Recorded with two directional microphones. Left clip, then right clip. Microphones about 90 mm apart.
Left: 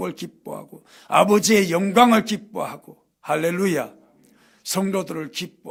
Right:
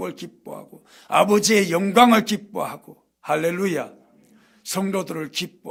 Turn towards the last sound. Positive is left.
turn(degrees=-5)  # may be behind; listen again after turning